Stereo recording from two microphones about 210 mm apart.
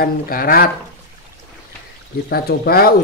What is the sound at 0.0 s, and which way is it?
Speech, 45° left (ahead or behind).